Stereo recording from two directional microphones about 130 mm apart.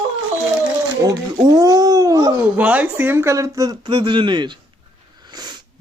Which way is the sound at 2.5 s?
10° right (ahead or behind).